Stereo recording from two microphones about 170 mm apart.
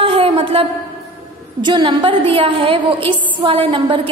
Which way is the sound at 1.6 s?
30° right (ahead or behind).